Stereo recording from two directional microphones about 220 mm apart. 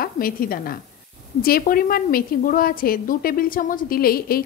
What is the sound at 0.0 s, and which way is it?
A woman's voice, 40° left (ahead or behind).